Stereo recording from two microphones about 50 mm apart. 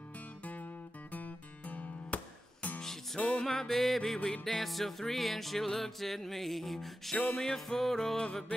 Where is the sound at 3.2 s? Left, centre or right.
Centre.